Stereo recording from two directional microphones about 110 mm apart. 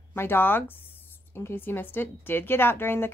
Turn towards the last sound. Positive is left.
turn(degrees=20)  # may be behind; listen again after turning